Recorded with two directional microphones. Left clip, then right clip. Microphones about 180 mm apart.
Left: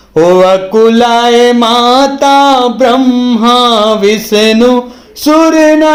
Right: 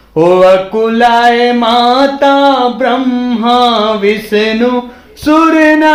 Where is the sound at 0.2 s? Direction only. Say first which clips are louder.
Left 1 dB; 35° left (ahead or behind).